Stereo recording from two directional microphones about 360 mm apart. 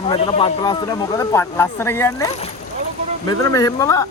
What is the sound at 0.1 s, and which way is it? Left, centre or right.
Speech, centre.